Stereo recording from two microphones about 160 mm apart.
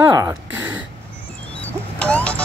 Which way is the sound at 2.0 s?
10° left (ahead or behind).